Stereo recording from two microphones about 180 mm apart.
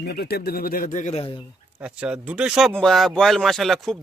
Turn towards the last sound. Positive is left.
turn(degrees=0)  # may be behind; listen again after turning